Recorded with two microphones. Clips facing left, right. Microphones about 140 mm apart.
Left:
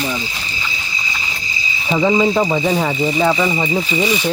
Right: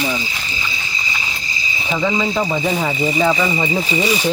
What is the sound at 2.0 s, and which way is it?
Speech, 15° left (ahead or behind).